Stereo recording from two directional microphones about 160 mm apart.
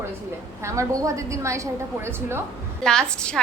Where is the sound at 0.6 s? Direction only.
20° right (ahead or behind).